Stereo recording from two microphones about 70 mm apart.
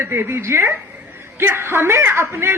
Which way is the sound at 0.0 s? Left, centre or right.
Right.